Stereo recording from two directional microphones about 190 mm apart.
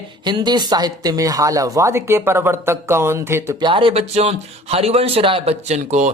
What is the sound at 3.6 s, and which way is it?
Speech, 25° right (ahead or behind).